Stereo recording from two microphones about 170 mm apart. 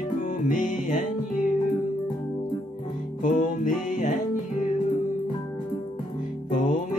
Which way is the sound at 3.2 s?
50° left (ahead or behind).